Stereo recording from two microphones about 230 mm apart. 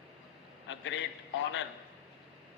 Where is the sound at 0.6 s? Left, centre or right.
Left.